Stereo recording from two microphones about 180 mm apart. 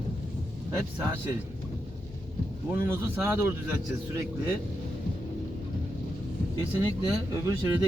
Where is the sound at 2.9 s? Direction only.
15° right (ahead or behind).